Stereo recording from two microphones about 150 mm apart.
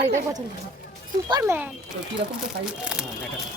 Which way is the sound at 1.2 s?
25° right (ahead or behind).